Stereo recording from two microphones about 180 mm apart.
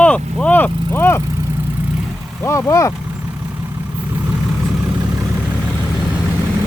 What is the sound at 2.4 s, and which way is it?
Speech, 15° left (ahead or behind).